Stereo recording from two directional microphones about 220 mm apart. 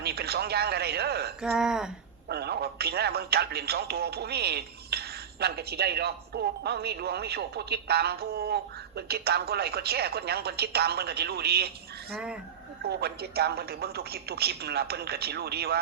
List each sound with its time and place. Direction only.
0.0 s speech: 45° right (ahead or behind)
1.4 s speech: 5° right (ahead or behind)
2.3 s speech: 45° right (ahead or behind)
12.1 s speech: 5° right (ahead or behind)
12.8 s speech: 45° right (ahead or behind)